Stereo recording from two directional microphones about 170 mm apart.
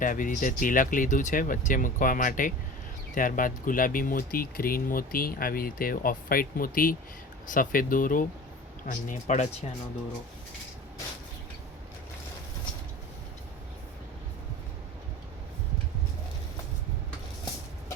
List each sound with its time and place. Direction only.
0.0 s speech: 50° left (ahead or behind)